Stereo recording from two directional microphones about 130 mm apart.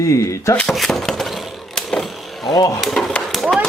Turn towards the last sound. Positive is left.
turn(degrees=0)  # may be behind; listen again after turning